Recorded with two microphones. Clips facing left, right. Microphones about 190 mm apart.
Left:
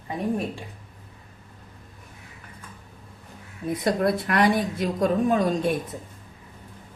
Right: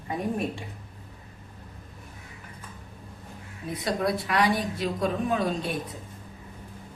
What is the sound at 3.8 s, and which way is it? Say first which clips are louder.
A woman's voice: left 4 dB; 50° left (ahead or behind).